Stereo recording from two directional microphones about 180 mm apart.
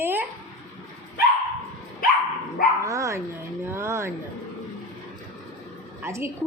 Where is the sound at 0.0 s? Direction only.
10° right (ahead or behind).